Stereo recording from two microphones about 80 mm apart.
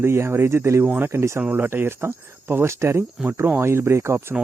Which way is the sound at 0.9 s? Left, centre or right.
Right.